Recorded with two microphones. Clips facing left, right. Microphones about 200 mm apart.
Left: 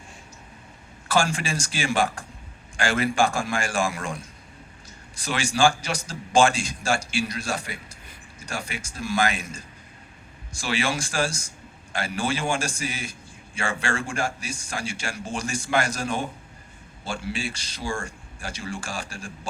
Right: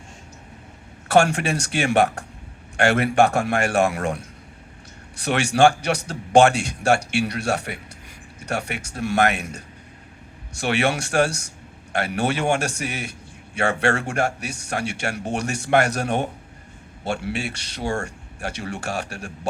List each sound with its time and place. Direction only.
1.0 s a man's voice: 65° right (ahead or behind)